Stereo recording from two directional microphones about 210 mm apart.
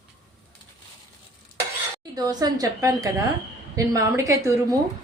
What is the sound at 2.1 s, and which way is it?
A woman's voice, 20° right (ahead or behind).